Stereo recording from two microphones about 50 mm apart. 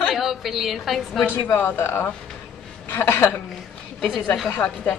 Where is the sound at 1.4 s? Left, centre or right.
Left.